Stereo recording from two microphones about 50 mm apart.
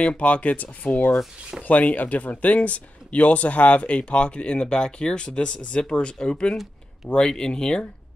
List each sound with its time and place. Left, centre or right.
0.0 s speech: left